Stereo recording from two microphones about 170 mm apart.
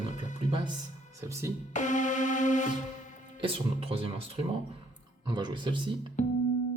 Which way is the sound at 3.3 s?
35° right (ahead or behind).